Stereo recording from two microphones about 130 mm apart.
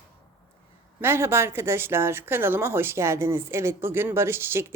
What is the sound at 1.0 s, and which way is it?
Speech, 20° right (ahead or behind).